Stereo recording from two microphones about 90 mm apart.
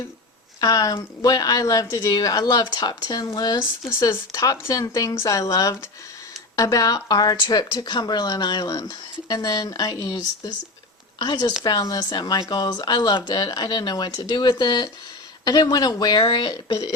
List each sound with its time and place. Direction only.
0.6 s speech: 40° left (ahead or behind)
3.8 s speech: 30° left (ahead or behind); by 16.7 s 55° left (ahead or behind)